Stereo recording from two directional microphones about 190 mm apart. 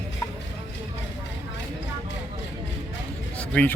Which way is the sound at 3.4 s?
5° left (ahead or behind).